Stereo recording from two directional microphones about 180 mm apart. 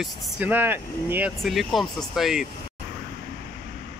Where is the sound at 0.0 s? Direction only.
10° right (ahead or behind).